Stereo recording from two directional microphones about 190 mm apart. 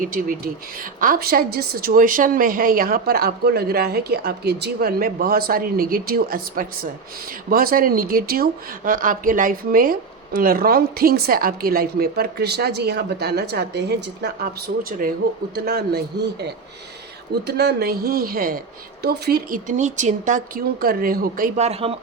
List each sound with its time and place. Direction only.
0.0 s a man's voice: 45° right (ahead or behind)
20.8 s speech: 50° right (ahead or behind); by 21.9 s 30° right (ahead or behind)